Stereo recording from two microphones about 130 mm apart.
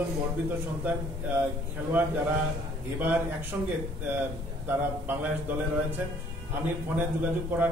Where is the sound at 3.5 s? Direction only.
15° right (ahead or behind).